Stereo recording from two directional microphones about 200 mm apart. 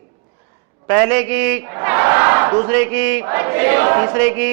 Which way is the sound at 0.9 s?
10° right (ahead or behind).